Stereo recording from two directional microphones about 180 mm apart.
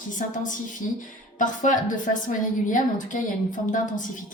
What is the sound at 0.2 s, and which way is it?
Speech, 45° left (ahead or behind).